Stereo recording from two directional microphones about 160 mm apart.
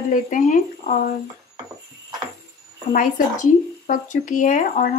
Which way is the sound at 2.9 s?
60° left (ahead or behind).